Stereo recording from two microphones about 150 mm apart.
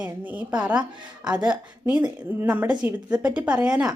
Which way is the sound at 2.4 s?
10° right (ahead or behind).